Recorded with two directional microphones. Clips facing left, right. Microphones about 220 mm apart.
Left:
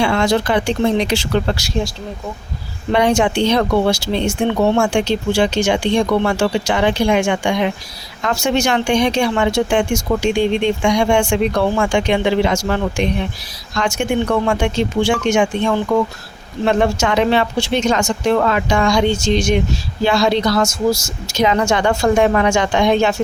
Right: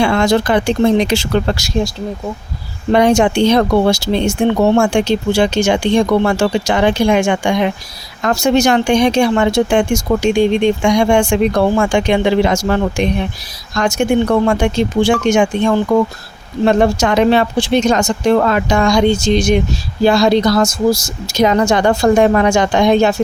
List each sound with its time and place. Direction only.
0.0 s speech: 50° right (ahead or behind)
2.9 s speech: 40° right (ahead or behind)